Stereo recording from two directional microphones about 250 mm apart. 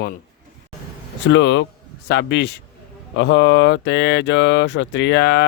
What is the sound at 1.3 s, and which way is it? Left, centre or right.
A man's voice, left.